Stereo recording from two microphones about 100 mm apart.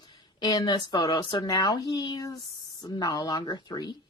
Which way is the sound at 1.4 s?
40° left (ahead or behind).